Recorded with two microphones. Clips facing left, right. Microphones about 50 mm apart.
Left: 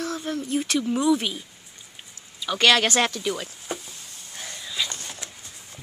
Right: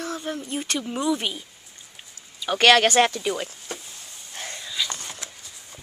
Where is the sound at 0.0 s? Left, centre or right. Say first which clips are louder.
Left 1 dB; centre.